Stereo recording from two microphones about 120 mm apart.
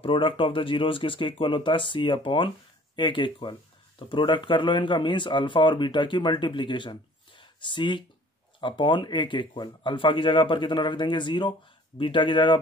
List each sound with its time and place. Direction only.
0.0 s speech: 45° left (ahead or behind)